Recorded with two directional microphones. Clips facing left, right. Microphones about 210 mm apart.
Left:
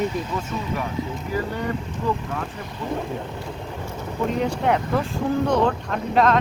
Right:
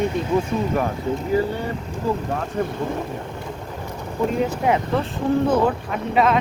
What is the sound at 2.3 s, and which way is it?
Speech, 40° right (ahead or behind).